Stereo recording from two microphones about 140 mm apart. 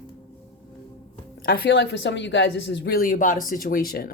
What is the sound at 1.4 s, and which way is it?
Speech, 90° left.